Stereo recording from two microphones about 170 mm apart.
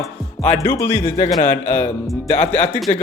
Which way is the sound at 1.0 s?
50° left (ahead or behind).